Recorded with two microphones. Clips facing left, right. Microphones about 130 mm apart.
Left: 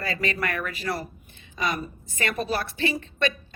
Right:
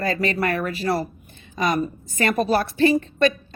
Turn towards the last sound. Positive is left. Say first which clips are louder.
# right 9 dB
turn(degrees=-40)  # may be behind; listen again after turning